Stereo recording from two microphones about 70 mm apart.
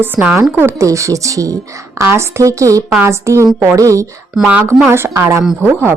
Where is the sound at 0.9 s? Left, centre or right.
Right.